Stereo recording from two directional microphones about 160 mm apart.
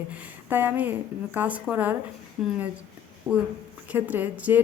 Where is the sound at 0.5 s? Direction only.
10° right (ahead or behind).